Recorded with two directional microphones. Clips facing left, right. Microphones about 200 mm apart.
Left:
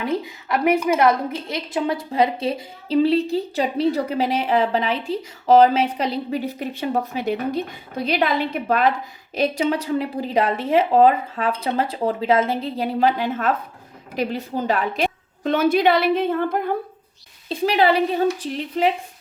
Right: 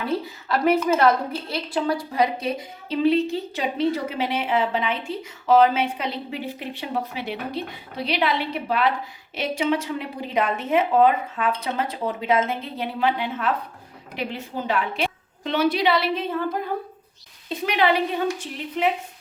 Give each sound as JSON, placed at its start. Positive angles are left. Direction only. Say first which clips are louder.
{"t": 0.4, "sound": "a woman's voice", "louder": "left 1 dB", "side_deg": 15}
{"t": 17.5, "sound": "a woman's voice", "louder": "left 3 dB", "side_deg": 35}